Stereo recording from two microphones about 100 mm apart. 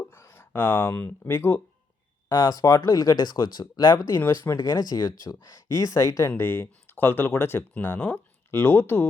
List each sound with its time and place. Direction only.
0.0 s speech: 25° left (ahead or behind)
2.3 s speech: 35° left (ahead or behind); by 9.0 s 20° left (ahead or behind)